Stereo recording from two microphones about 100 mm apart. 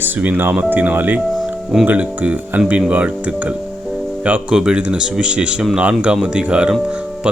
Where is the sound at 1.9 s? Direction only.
15° right (ahead or behind).